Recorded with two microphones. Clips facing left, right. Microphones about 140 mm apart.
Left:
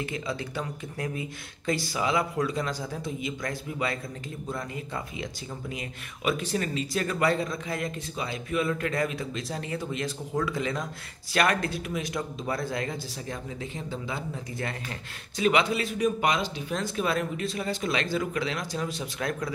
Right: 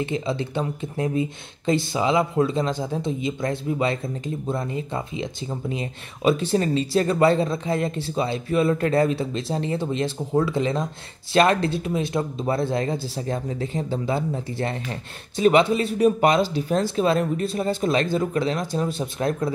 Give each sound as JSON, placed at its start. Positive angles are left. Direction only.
{"t": 0.0, "sound": "speech", "side_deg": -25}